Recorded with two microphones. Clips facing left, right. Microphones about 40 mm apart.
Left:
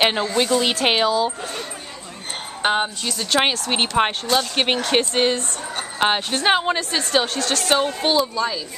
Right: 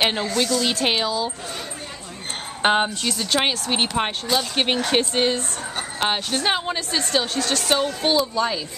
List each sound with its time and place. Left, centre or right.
0.0 s a woman's voice: centre
2.6 s speech: centre
3.7 s speech: centre
5.9 s a woman's voice: centre
6.8 s speech: centre
7.8 s speech: centre